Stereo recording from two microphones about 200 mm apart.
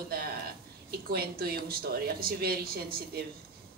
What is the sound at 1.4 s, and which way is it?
Speech, 50° right (ahead or behind).